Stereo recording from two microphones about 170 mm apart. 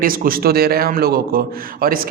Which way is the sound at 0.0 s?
55° right (ahead or behind).